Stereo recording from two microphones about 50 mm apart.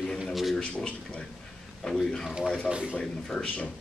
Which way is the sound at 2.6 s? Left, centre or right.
Right.